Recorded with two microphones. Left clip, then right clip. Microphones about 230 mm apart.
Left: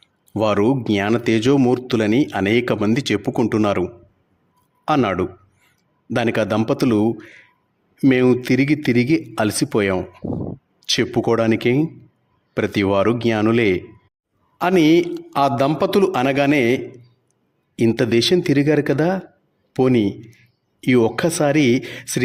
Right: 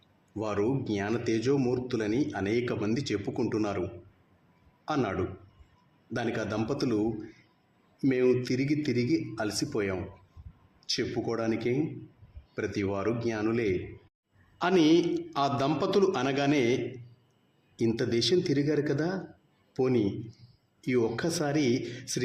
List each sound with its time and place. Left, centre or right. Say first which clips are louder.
0.3 s a man's voice: left 12 dB; left